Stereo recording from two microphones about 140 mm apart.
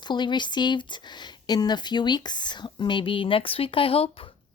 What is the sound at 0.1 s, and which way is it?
Speech, 35° left (ahead or behind).